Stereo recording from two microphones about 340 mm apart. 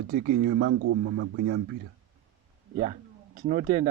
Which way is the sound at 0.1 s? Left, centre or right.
Right.